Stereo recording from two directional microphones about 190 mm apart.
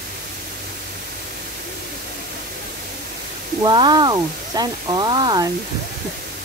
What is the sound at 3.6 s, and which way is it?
Speech, 20° right (ahead or behind).